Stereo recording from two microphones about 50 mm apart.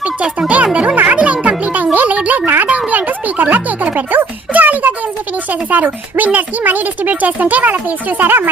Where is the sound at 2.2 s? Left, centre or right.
Right.